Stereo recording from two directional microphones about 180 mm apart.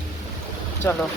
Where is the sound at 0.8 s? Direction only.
10° left (ahead or behind).